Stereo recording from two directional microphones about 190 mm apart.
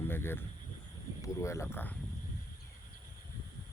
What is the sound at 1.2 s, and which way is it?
Speech, 15° left (ahead or behind).